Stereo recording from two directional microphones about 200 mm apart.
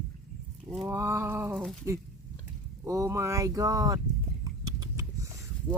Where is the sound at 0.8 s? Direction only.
15° right (ahead or behind).